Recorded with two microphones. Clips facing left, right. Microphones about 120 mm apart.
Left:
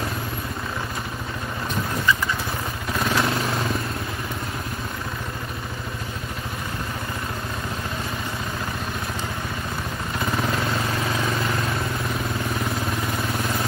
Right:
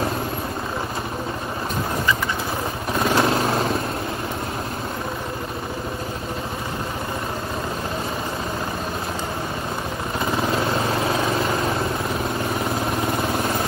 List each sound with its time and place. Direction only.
3.0 s vehicle: 25° right (ahead or behind)